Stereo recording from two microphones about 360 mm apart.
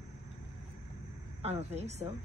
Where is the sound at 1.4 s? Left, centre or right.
Centre.